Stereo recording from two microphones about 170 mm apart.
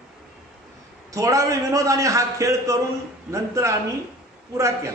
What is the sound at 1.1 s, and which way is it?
A man's voice, 20° right (ahead or behind).